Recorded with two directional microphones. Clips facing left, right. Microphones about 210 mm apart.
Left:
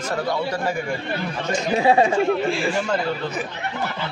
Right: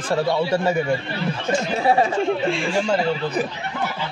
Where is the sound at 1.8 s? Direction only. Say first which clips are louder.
Left 3 dB; 15° left (ahead or behind).